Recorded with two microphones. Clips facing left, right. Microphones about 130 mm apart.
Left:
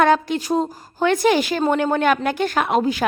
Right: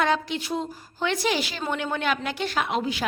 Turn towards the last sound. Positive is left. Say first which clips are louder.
# left 7 dB
turn(degrees=45)  # may be behind; listen again after turning